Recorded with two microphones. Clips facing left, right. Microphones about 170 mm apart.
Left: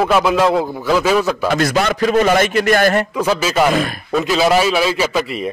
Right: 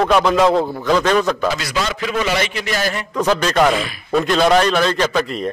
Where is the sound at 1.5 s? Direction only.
55° left (ahead or behind).